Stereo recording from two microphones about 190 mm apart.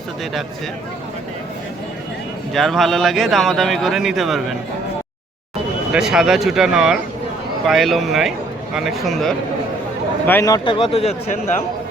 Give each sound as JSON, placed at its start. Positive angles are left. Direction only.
{"t": 2.5, "sound": "speech", "side_deg": 0}
{"t": 5.9, "sound": "speech", "side_deg": 0}
{"t": 10.2, "sound": "a man's voice", "side_deg": 15}